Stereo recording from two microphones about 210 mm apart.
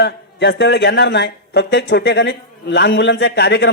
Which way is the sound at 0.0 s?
55° left (ahead or behind).